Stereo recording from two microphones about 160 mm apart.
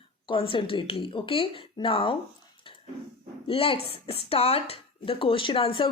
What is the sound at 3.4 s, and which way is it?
Speech, 35° left (ahead or behind).